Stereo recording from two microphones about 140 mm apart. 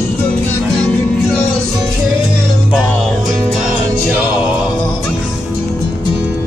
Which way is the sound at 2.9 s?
5° left (ahead or behind).